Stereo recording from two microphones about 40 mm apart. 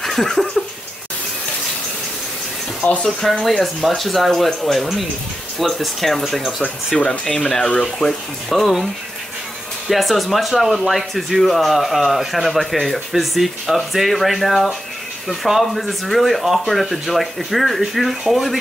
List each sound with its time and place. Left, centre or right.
0.0 s a sound: centre
2.8 s speech: left
3.2 s speech: centre
7.1 s speech: centre